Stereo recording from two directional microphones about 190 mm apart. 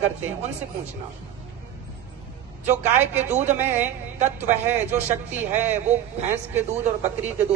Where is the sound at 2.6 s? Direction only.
10° right (ahead or behind).